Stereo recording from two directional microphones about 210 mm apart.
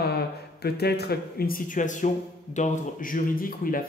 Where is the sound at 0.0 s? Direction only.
50° left (ahead or behind).